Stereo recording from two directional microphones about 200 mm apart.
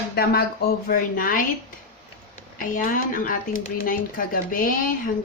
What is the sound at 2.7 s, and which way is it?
Speech, 45° left (ahead or behind).